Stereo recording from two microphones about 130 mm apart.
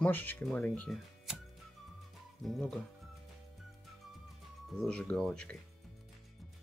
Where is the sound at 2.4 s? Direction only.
Centre (ahead or behind).